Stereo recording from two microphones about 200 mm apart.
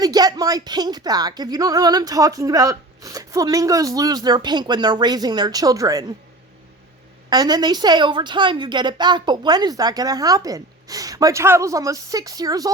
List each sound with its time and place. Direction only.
0.0 s a woman's voice: 20° right (ahead or behind)
7.3 s a woman's voice: 20° right (ahead or behind)